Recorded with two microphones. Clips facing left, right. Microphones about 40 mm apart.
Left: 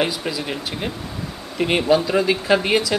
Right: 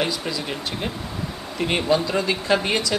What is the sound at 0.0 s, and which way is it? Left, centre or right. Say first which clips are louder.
Speech: left 2 dB; centre.